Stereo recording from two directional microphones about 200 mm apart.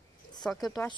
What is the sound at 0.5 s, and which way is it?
Speech, 20° left (ahead or behind).